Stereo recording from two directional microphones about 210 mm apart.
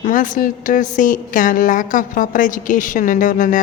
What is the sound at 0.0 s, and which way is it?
A woman's voice, 40° left (ahead or behind).